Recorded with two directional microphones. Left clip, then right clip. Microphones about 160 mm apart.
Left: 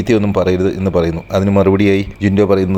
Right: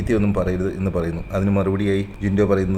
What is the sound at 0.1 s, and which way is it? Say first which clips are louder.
A man's voice: left 8 dB; 25° left (ahead or behind).